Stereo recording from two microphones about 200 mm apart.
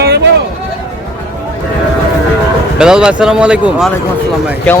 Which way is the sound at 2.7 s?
5° right (ahead or behind).